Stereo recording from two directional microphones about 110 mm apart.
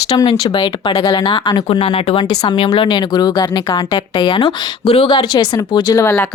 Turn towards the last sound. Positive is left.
turn(degrees=25)  # may be behind; listen again after turning